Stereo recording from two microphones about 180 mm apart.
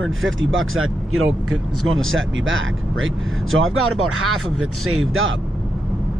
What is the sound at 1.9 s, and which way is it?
Speech, 90° right.